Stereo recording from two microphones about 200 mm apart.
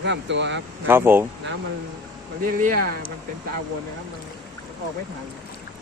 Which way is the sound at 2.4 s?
45° right (ahead or behind).